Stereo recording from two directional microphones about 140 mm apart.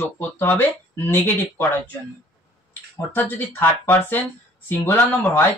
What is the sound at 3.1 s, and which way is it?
Speech, 15° left (ahead or behind).